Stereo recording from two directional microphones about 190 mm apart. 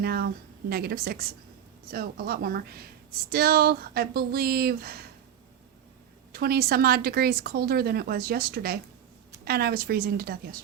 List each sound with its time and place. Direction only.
0.0 s speech: 55° right (ahead or behind)
6.3 s speech: 55° right (ahead or behind)